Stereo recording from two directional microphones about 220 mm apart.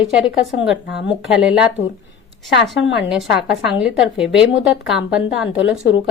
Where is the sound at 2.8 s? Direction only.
55° left (ahead or behind).